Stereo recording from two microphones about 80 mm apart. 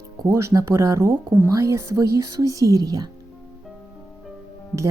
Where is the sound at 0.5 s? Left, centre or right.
Right.